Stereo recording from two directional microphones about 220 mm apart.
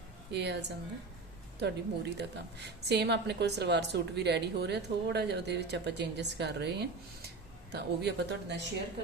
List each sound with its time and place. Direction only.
0.3 s a woman's voice: 50° right (ahead or behind)
1.5 s a woman's voice: 50° right (ahead or behind)